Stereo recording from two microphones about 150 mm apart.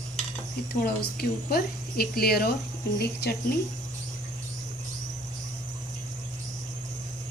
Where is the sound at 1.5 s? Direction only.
90° left.